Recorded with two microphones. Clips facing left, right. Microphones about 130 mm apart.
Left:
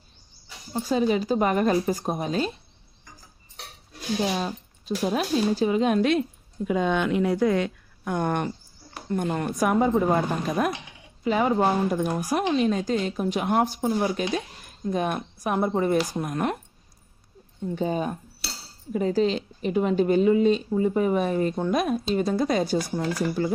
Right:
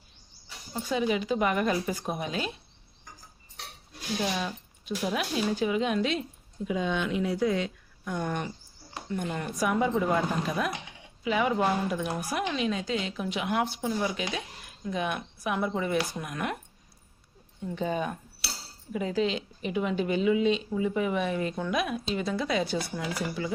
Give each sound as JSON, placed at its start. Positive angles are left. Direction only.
{"t": 0.7, "sound": "a woman's voice", "side_deg": 35}
{"t": 4.2, "sound": "a woman's voice", "side_deg": 35}
{"t": 17.7, "sound": "a woman's voice", "side_deg": 35}